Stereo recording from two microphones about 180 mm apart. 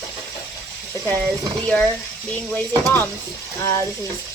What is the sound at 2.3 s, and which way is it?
Speech, 10° left (ahead or behind).